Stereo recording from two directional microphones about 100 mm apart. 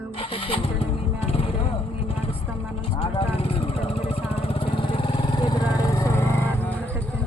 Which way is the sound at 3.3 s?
75° left (ahead or behind).